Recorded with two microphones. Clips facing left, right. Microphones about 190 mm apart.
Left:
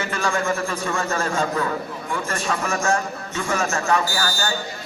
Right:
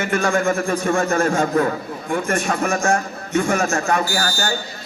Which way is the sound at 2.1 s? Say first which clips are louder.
Right 5 dB; 50° right (ahead or behind).